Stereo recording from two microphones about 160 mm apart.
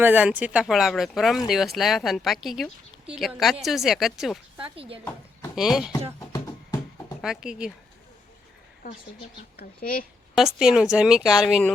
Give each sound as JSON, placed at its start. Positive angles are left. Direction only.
{"t": 0.0, "sound": "speech", "side_deg": -10}
{"t": 4.5, "sound": "speech", "side_deg": -35}
{"t": 5.5, "sound": "speech", "side_deg": 0}
{"t": 6.1, "sound": "music", "side_deg": 20}
{"t": 7.2, "sound": "speech", "side_deg": -5}
{"t": 9.6, "sound": "speech", "side_deg": 65}
{"t": 10.3, "sound": "speech", "side_deg": -5}